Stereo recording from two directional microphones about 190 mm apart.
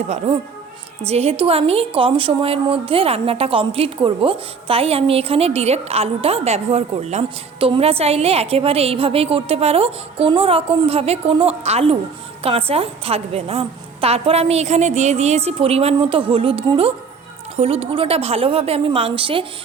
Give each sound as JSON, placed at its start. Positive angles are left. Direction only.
{"t": 0.1, "sound": "a woman's voice", "side_deg": -35}